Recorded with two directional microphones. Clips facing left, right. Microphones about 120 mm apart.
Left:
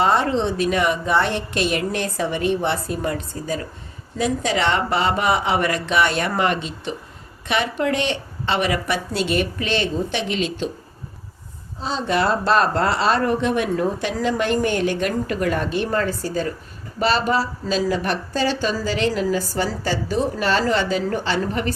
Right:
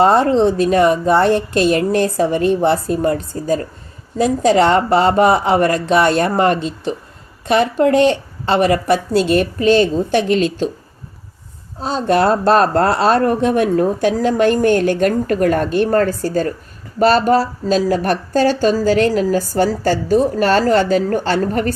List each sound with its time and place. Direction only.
0.0 s a woman's voice: 40° right (ahead or behind)
11.8 s a woman's voice: 45° right (ahead or behind)